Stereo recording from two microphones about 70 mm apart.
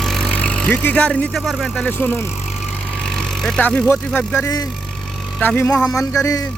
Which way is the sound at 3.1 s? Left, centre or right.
Centre.